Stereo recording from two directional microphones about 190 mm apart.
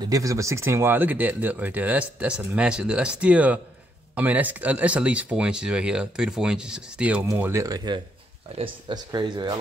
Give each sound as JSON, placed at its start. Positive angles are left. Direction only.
{"t": 0.1, "sound": "speech", "side_deg": -15}